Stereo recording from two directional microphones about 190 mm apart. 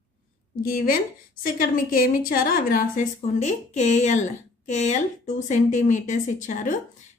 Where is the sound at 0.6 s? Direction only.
50° left (ahead or behind).